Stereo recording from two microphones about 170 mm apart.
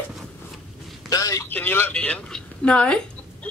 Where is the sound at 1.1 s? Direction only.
20° left (ahead or behind).